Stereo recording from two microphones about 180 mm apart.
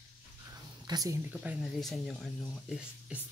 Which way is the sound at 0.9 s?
20° right (ahead or behind).